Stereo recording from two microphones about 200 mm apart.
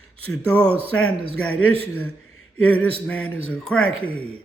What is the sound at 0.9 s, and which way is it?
Speech, 90° left.